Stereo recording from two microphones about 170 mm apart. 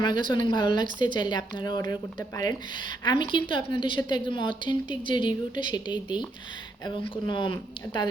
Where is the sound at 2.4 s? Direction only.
25° left (ahead or behind).